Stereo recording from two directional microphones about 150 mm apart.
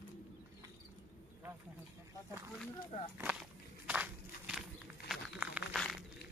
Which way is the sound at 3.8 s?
10° right (ahead or behind).